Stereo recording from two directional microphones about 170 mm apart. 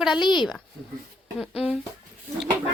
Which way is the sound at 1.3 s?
5° right (ahead or behind).